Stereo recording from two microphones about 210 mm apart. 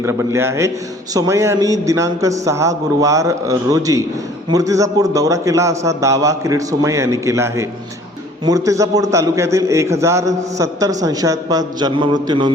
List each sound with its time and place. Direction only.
0.0 s a man's voice: 15° right (ahead or behind)